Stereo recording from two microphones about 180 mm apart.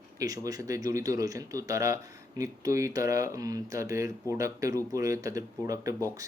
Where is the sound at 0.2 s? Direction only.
20° right (ahead or behind).